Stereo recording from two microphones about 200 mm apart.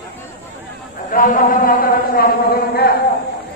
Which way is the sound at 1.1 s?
45° left (ahead or behind).